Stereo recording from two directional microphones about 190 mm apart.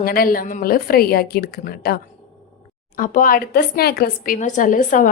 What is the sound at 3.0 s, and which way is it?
A woman's voice, 45° left (ahead or behind).